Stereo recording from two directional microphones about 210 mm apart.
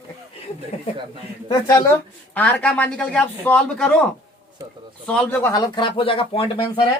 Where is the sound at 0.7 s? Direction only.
30° left (ahead or behind).